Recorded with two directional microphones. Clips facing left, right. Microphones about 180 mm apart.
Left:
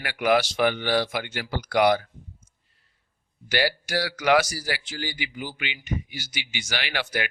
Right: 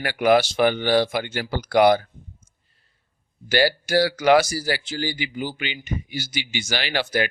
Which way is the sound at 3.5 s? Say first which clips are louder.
Right 5 dB; 35° right (ahead or behind).